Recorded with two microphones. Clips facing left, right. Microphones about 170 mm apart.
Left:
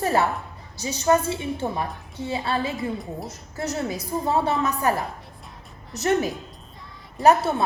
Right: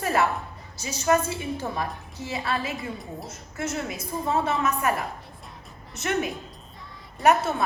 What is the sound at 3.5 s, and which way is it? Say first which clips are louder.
A woman's voice: left 3 dB; 35° left (ahead or behind).